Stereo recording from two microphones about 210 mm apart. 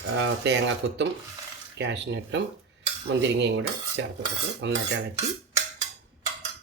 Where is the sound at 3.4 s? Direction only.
55° right (ahead or behind).